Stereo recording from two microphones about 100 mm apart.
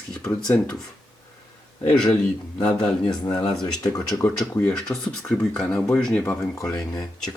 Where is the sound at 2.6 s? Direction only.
10° left (ahead or behind).